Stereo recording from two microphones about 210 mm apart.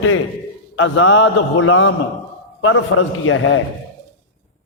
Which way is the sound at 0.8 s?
65° left (ahead or behind).